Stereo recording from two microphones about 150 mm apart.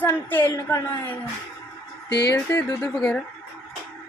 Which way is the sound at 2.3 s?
15° left (ahead or behind).